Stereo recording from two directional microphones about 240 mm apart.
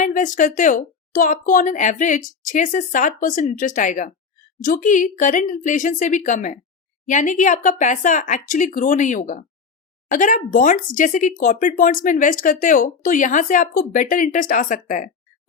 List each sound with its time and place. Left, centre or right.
0.0 s a woman's voice: left